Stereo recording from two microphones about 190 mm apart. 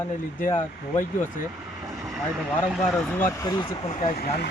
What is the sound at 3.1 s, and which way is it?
Speech, 15° left (ahead or behind).